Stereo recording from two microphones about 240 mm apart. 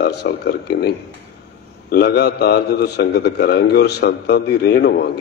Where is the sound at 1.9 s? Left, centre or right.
Left.